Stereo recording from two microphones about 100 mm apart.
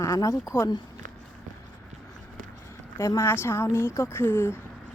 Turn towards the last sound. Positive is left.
turn(degrees=25)  # may be behind; listen again after turning